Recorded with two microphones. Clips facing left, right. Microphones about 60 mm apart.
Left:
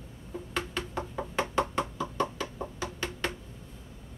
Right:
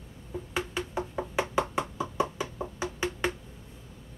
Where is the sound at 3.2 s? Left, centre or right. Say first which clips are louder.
Right 3 dB; centre.